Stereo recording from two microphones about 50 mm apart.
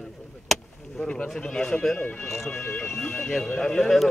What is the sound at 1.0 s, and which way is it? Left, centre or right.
Speech, left.